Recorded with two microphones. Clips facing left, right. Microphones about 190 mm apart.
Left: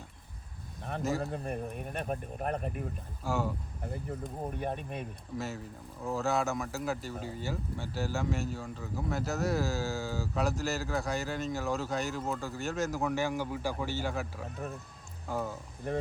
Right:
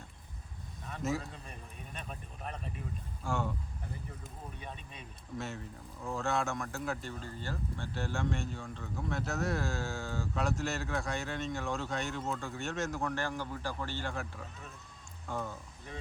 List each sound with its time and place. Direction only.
1.2 s speech: 55° left (ahead or behind)
3.2 s speech: 5° left (ahead or behind)
4.4 s speech: 55° left (ahead or behind)
5.4 s speech: centre (ahead or behind)
15.9 s speech: 55° left (ahead or behind)